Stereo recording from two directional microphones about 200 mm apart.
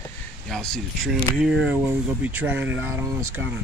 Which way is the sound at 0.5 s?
5° left (ahead or behind).